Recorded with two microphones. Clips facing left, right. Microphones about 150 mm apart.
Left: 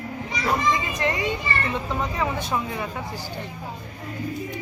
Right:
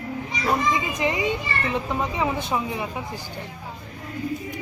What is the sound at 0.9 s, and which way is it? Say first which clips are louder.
Speech: right 1 dB; 15° right (ahead or behind).